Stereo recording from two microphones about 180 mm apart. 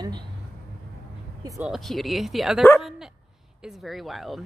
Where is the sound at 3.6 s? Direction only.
Centre (ahead or behind).